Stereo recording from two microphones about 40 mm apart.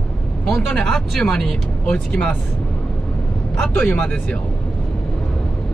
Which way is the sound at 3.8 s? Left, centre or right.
Left.